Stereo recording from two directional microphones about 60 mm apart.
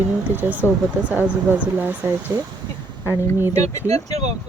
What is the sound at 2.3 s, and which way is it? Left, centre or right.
Speech, right.